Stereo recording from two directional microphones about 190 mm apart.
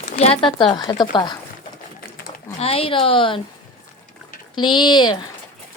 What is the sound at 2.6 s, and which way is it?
Speech, 30° left (ahead or behind).